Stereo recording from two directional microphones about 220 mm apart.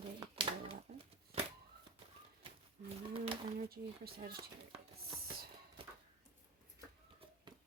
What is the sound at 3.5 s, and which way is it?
Speech, 45° right (ahead or behind).